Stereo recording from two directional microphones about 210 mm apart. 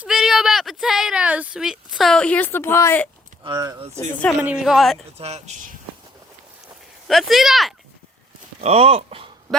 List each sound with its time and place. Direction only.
0.0 s speech: 5° right (ahead or behind)
3.4 s speech: 20° right (ahead or behind)
4.4 s speech: 5° right (ahead or behind)
5.1 s speech: 30° right (ahead or behind)
7.1 s speech: centre (ahead or behind)
8.6 s speech: 30° right (ahead or behind)